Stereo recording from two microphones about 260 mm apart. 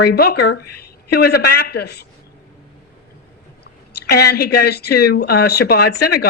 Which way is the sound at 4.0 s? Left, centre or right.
Left.